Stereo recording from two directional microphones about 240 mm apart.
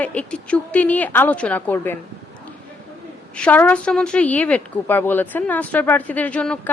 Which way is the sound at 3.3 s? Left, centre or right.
Centre.